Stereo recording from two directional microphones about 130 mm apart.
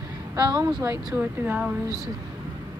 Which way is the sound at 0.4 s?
30° right (ahead or behind).